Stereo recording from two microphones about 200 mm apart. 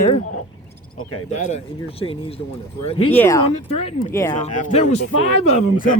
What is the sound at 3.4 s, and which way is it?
A man's voice, 30° left (ahead or behind).